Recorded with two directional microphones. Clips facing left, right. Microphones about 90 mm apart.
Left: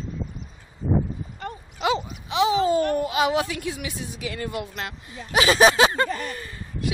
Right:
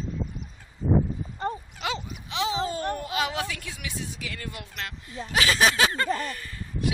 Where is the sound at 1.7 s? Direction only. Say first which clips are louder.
Left 7 dB; 20° left (ahead or behind).